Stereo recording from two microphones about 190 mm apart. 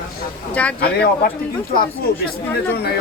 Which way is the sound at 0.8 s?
55° left (ahead or behind).